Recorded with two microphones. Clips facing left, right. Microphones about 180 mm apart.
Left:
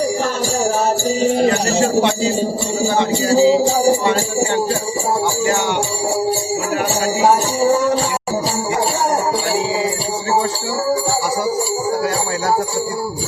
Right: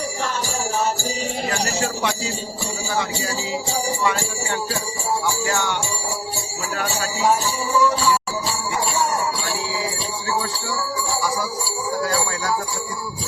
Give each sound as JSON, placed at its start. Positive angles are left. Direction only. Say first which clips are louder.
{"t": 1.5, "sound": "jingle bell", "louder": "left 8 dB", "side_deg": 25}
{"t": 7.2, "sound": "music", "louder": "left 5 dB", "side_deg": 65}